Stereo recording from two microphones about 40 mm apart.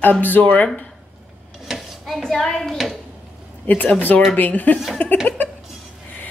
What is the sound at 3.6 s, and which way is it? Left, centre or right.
Speech, left.